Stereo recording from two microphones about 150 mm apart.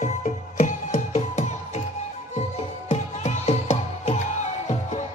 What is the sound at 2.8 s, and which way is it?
Music, 45° left (ahead or behind).